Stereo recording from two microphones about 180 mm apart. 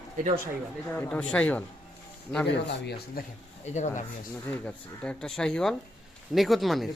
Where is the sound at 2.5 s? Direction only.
70° left (ahead or behind).